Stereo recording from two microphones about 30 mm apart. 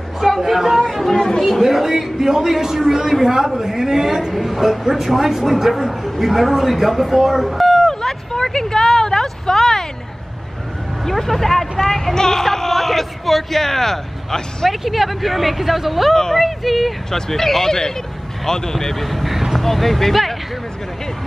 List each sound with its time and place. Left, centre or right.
0.2 s a sound: centre
1.1 s speech: left
1.6 s a man's voice: centre
7.4 s a sound: centre
7.9 s vehicle: centre
11.1 s a man's voice: centre
14.7 s speech: centre
17.1 s speech: centre
19.0 s speech: centre